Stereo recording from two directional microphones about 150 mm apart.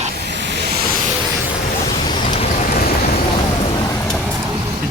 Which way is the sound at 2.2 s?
50° left (ahead or behind).